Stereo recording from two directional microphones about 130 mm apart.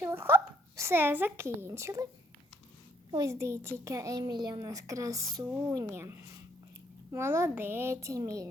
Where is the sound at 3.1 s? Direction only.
30° right (ahead or behind).